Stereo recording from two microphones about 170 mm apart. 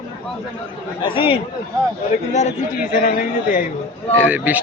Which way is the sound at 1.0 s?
30° left (ahead or behind).